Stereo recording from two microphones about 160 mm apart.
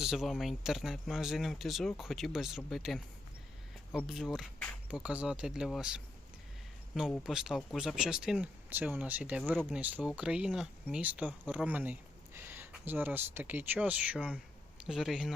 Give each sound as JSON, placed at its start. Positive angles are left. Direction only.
{"t": 0.0, "sound": "speech", "side_deg": 0}
{"t": 4.0, "sound": "speech", "side_deg": 0}
{"t": 7.1, "sound": "speech", "side_deg": 0}